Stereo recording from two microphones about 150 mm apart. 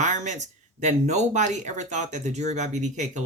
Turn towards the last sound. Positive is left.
turn(degrees=-50)  # may be behind; listen again after turning